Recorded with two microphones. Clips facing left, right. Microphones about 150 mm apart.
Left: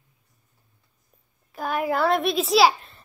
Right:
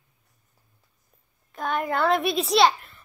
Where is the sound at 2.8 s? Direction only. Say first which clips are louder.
Left 1 dB; 25° left (ahead or behind).